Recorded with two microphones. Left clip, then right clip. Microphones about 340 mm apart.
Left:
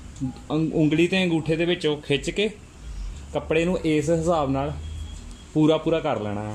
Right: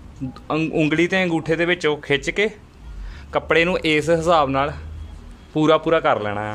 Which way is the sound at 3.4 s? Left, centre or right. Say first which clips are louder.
Right 5 dB; right.